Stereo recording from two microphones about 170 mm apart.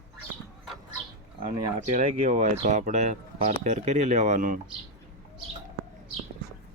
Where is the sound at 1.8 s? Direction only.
45° right (ahead or behind).